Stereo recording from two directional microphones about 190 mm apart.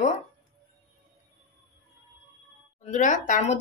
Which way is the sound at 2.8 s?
40° left (ahead or behind).